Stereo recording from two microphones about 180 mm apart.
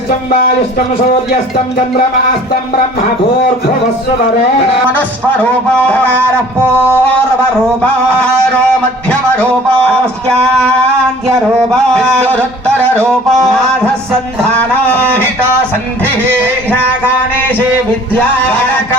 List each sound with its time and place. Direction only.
4.9 s music: 10° left (ahead or behind)
7.8 s music: 5° left (ahead or behind)
11.5 s music: 5° left (ahead or behind)
13.0 s music: 20° right (ahead or behind)
14.6 s music: 10° left (ahead or behind)